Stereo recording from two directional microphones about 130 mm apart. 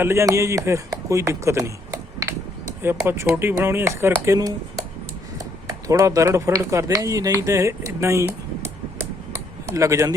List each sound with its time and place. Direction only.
0.0 s speech: 20° right (ahead or behind)
5.9 s speech: 25° right (ahead or behind)